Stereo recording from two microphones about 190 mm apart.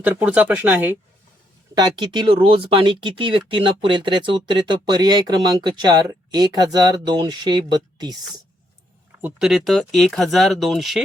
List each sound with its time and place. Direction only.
0.0 s speech: 10° right (ahead or behind)
1.7 s speech: 20° right (ahead or behind)
9.2 s speech: centre (ahead or behind)